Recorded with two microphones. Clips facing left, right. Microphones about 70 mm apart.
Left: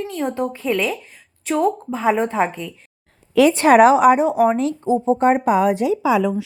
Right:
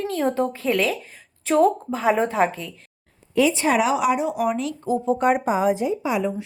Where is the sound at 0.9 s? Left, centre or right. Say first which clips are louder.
Left 1 dB; centre.